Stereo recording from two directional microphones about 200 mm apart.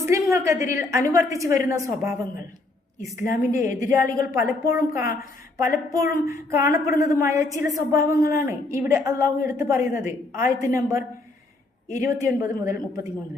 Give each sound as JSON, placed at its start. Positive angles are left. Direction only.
{"t": 0.0, "sound": "a woman's voice", "side_deg": -15}